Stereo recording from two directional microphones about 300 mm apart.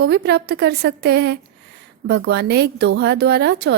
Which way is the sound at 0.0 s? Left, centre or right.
Right.